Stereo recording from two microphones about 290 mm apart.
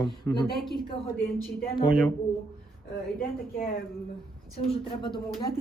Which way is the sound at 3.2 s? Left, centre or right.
Left.